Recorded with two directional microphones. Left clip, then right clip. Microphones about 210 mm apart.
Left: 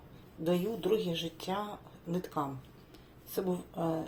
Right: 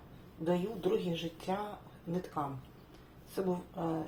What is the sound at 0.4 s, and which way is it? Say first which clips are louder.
Speech: left 2 dB; 40° left (ahead or behind).